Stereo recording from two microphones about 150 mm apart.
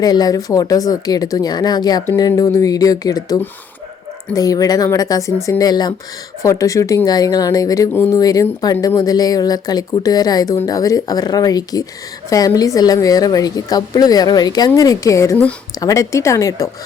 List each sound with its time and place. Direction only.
0.0 s speech: 25° left (ahead or behind)